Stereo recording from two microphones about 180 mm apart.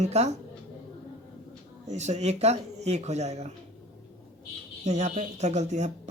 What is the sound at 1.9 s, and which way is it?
Speech, 40° right (ahead or behind).